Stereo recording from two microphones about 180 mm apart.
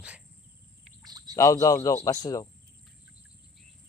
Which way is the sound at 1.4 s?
20° left (ahead or behind).